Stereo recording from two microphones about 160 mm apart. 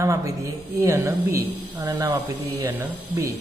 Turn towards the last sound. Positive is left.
turn(degrees=-20)  # may be behind; listen again after turning